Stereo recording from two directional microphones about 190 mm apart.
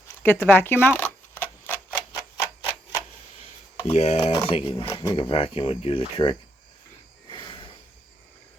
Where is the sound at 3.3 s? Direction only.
30° left (ahead or behind).